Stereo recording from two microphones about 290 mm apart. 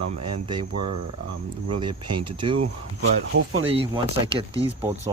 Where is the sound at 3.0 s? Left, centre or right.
Right.